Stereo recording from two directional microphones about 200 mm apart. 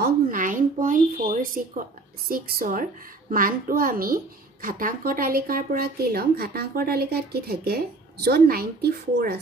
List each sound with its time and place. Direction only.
0.0 s speech: 45° right (ahead or behind)